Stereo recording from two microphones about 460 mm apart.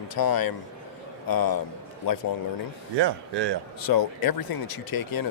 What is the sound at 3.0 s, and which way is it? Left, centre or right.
Speech, right.